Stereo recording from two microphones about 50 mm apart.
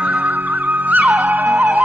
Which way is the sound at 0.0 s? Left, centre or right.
Right.